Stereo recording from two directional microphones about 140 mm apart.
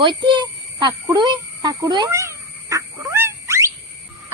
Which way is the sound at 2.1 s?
20° right (ahead or behind).